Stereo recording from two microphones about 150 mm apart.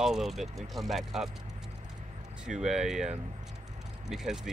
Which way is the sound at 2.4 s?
5° right (ahead or behind).